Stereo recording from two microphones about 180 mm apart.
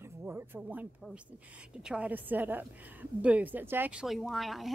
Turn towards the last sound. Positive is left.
turn(degrees=0)  # may be behind; listen again after turning